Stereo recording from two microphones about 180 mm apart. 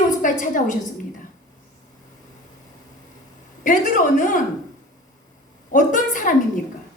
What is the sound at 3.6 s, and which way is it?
Speech, 45° left (ahead or behind).